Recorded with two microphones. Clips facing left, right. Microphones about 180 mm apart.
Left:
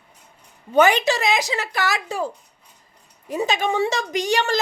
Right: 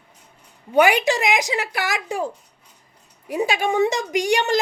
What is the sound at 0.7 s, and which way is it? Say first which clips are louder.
A woman's voice: even; 10° right (ahead or behind).